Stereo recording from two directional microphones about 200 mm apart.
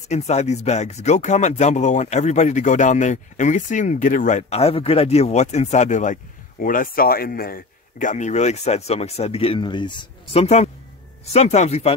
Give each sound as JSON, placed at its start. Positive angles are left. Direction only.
{"t": 0.1, "sound": "speech", "side_deg": 35}